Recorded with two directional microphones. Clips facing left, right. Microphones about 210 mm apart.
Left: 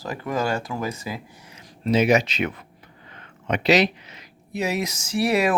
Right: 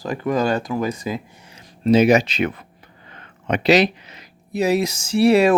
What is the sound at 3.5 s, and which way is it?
Speech, 35° right (ahead or behind).